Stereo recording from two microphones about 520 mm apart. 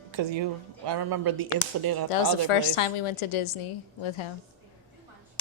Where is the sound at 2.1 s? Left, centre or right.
Left.